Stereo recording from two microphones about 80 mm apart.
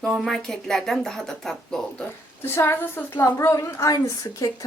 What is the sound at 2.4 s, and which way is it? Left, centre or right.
A woman's voice, left.